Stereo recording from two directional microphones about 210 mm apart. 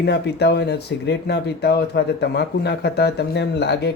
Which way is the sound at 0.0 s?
50° left (ahead or behind).